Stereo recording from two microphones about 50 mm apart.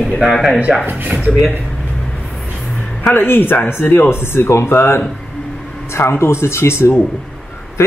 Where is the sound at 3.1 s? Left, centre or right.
Left.